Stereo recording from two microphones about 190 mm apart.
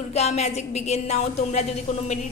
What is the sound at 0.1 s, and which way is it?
A woman's voice, 35° left (ahead or behind).